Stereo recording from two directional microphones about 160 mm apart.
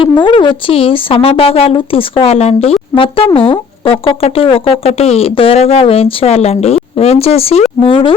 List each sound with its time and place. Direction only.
0.0 s speech: 30° left (ahead or behind)